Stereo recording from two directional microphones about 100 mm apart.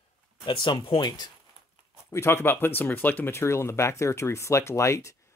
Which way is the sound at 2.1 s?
25° left (ahead or behind).